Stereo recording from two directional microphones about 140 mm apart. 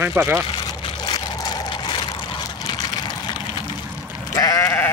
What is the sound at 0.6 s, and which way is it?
Vehicle, 30° left (ahead or behind).